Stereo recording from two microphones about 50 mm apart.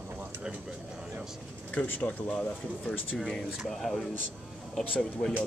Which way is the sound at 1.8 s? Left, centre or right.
Left.